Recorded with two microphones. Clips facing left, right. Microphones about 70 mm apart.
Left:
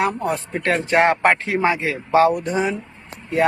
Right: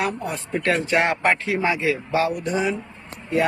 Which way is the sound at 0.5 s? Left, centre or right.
Left.